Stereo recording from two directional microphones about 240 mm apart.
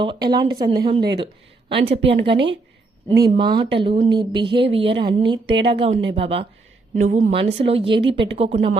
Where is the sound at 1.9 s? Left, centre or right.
Right.